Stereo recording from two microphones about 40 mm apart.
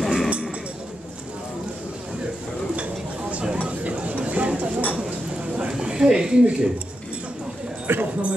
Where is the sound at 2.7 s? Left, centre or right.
Right.